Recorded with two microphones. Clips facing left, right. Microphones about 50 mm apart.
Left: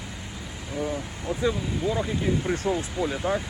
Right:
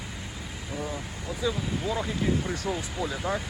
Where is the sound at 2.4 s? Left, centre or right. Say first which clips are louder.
Left 5 dB; left.